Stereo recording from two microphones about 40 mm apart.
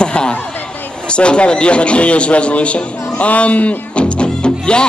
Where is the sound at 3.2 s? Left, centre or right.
Left.